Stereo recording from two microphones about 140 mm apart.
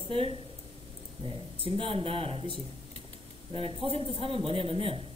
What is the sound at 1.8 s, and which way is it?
Speech, 40° right (ahead or behind).